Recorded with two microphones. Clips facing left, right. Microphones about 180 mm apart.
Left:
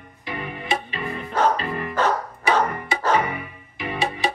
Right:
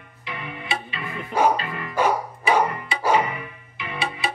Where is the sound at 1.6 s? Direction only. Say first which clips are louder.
Left 4 dB; 35° left (ahead or behind).